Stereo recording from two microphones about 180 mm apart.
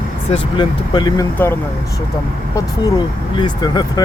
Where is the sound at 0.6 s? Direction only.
25° left (ahead or behind).